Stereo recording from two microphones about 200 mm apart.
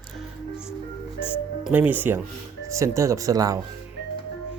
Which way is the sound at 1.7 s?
10° right (ahead or behind).